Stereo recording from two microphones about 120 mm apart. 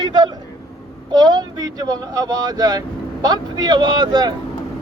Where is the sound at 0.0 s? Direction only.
35° right (ahead or behind).